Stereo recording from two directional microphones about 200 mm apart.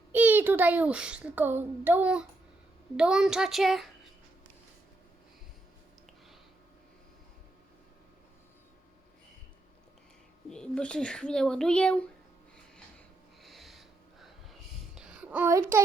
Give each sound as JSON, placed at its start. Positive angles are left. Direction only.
{"t": 0.1, "sound": "a child's voice", "side_deg": -10}
{"t": 10.5, "sound": "speech", "side_deg": 5}
{"t": 13.4, "sound": "snort", "side_deg": 0}
{"t": 14.9, "sound": "a sound", "side_deg": -5}